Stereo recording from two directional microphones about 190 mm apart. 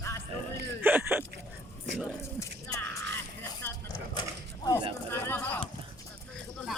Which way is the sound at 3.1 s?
15° left (ahead or behind).